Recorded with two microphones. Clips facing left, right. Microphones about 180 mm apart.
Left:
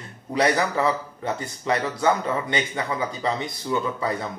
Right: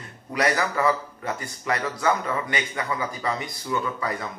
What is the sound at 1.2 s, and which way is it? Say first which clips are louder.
Speech: left 3 dB; 25° left (ahead or behind).